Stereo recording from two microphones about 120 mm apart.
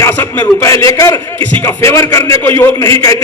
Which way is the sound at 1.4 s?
15° left (ahead or behind).